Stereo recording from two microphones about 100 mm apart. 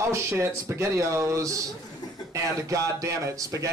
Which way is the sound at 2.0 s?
40° left (ahead or behind).